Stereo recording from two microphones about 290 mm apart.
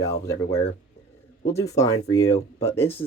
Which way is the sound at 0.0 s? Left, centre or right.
Centre.